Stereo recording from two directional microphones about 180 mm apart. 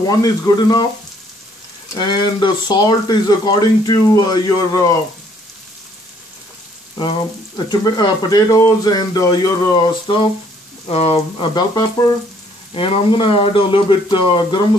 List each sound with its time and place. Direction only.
0.0 s speech: 20° left (ahead or behind)
2.0 s speech: 25° left (ahead or behind)
7.0 s speech: 25° left (ahead or behind)
10.9 s frying: 35° left (ahead or behind)
12.7 s speech: 30° left (ahead or behind)